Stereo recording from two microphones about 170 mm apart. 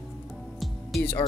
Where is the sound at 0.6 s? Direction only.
Centre (ahead or behind).